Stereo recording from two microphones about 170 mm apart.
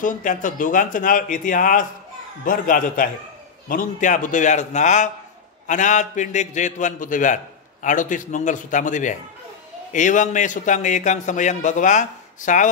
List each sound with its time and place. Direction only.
0.0 s a man's voice: 50° left (ahead or behind)